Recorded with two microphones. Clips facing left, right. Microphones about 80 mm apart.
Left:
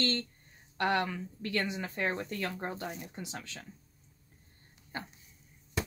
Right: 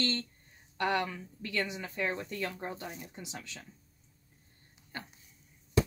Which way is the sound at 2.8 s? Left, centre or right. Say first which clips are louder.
Left 3 dB; centre.